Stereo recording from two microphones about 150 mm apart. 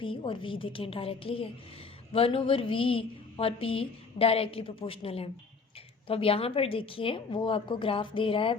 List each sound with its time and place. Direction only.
0.0 s a woman's voice: 35° left (ahead or behind)